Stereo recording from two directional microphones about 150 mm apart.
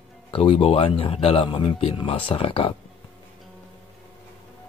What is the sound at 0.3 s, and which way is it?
Speech, 35° left (ahead or behind).